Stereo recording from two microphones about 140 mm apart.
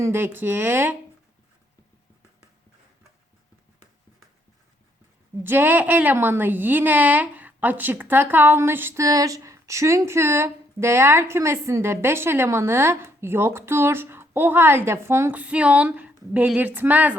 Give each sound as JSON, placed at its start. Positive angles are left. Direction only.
{"t": 0.0, "sound": "a woman's voice", "side_deg": -15}
{"t": 5.4, "sound": "a woman's voice", "side_deg": -15}